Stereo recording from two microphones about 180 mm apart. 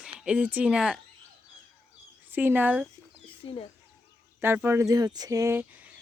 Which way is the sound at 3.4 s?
30° left (ahead or behind).